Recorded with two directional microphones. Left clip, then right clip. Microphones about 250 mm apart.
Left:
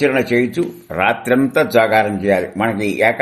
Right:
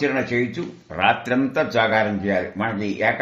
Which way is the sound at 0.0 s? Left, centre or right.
Left.